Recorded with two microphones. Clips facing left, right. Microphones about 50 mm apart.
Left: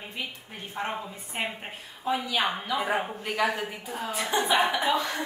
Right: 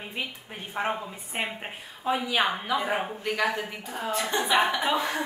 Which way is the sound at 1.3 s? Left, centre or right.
Centre.